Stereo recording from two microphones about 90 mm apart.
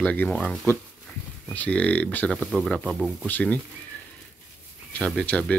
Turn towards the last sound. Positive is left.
turn(degrees=15)  # may be behind; listen again after turning